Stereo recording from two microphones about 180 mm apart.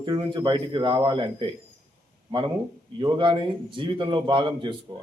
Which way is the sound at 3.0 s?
25° right (ahead or behind).